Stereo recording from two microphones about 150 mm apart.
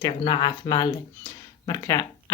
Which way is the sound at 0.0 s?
30° left (ahead or behind).